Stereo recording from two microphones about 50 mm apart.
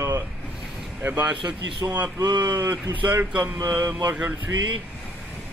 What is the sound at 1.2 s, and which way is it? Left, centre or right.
Speech, right.